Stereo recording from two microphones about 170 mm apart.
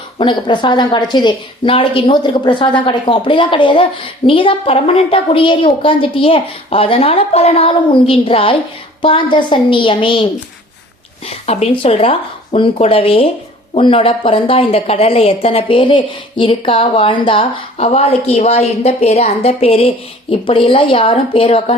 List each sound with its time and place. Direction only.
0.2 s a woman's voice: 30° left (ahead or behind)
11.4 s a woman's voice: 35° left (ahead or behind)